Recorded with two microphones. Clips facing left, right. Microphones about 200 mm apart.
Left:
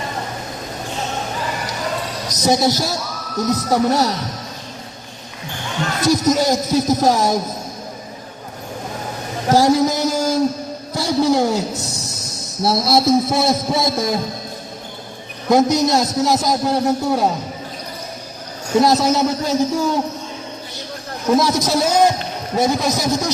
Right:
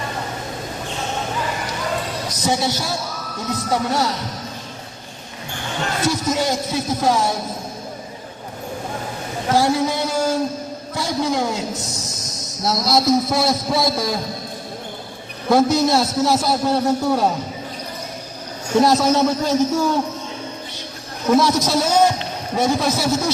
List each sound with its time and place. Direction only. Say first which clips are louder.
2.6 s a man's voice: left 4 dB; 40° left (ahead or behind)
6.0 s speech: left 5 dB; 40° left (ahead or behind)
9.5 s a sound: left 4 dB; 40° left (ahead or behind)
10.9 s speech: left 5 dB; 35° left (ahead or behind)
12.6 s a man's voice: left 2 dB; 30° left (ahead or behind)
15.4 s a man's voice: left 1 dB; 15° left (ahead or behind)
18.7 s a man's voice: even; 10° left (ahead or behind)
21.2 s a man's voice: even; 10° left (ahead or behind)